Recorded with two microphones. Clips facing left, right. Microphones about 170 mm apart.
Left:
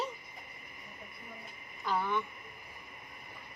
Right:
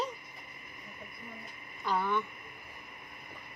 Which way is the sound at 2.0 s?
10° left (ahead or behind).